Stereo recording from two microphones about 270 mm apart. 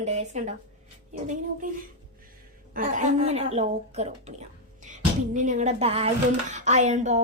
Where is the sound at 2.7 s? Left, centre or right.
Right.